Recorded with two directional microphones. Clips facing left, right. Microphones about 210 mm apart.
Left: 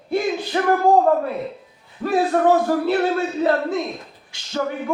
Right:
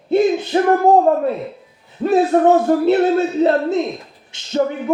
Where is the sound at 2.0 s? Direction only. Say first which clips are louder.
Right 5 dB; 20° right (ahead or behind).